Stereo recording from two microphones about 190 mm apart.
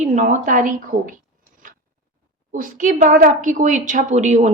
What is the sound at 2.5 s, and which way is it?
A woman's voice, 40° right (ahead or behind).